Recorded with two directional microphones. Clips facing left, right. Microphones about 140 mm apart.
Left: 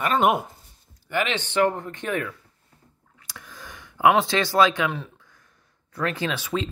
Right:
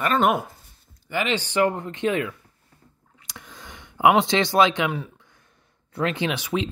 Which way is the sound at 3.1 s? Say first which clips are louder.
Even; 20° right (ahead or behind).